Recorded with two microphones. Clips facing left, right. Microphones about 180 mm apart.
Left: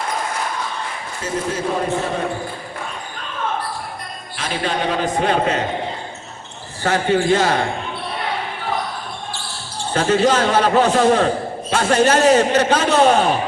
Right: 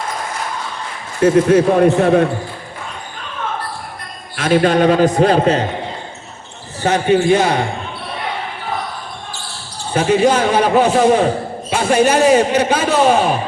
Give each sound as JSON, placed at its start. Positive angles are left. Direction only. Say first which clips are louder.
{"t": 1.2, "sound": "speech", "louder": "right 13 dB", "side_deg": -65}
{"t": 4.4, "sound": "a man's voice", "louder": "right 10 dB", "side_deg": -50}
{"t": 6.8, "sound": "a man's voice", "louder": "right 4 dB", "side_deg": -20}
{"t": 9.9, "sound": "a man's voice", "louder": "right 3 dB", "side_deg": -15}